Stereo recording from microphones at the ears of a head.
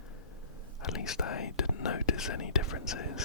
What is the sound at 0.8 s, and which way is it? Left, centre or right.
Whispering, left.